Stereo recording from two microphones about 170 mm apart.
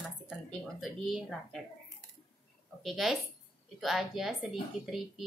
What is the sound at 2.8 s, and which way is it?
Speech, centre (ahead or behind).